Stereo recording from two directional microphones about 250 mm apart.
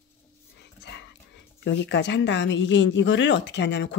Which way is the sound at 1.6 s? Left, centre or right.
Left.